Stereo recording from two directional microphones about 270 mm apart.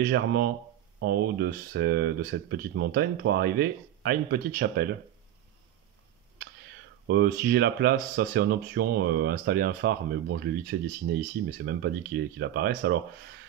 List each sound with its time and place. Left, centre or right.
0.0 s speech: right
7.1 s speech: right